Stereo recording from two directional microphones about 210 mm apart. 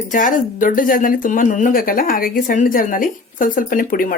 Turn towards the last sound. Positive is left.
turn(degrees=40)  # may be behind; listen again after turning